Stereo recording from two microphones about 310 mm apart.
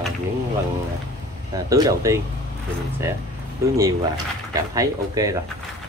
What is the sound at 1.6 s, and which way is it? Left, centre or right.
Speech, centre.